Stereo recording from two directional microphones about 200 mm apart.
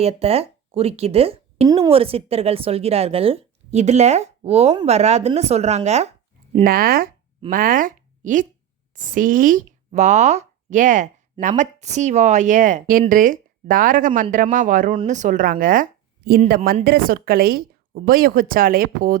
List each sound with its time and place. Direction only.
0.0 s speech: 30° right (ahead or behind)
6.7 s speech: 45° right (ahead or behind)